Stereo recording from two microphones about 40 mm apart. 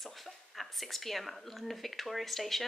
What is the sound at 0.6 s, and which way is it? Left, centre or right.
Speech, centre.